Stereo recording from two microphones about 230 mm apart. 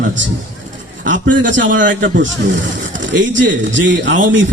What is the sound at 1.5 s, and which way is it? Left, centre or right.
A man's voice, right.